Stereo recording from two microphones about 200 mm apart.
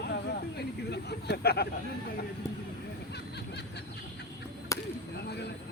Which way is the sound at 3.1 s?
55° left (ahead or behind).